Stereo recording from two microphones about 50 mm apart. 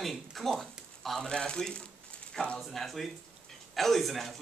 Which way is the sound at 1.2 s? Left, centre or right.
Centre.